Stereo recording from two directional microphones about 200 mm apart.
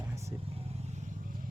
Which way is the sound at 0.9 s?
35° right (ahead or behind).